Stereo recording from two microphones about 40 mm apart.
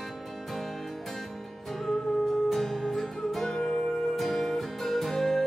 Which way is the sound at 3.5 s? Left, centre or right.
Centre.